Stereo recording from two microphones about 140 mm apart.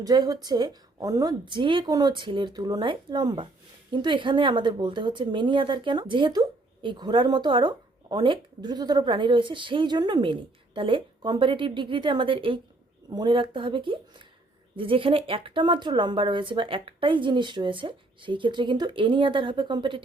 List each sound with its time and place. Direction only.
0.0 s a woman's voice: 30° right (ahead or behind)